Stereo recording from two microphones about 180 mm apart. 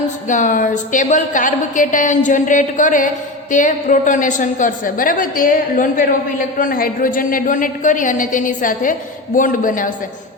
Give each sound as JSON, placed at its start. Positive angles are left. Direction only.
{"t": 0.3, "sound": "a woman's voice", "side_deg": 45}